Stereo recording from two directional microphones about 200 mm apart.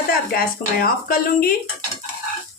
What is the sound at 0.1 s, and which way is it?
Speech, 45° left (ahead or behind).